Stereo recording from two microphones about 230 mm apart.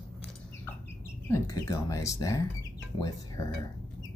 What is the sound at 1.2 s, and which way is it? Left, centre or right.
Speech, centre.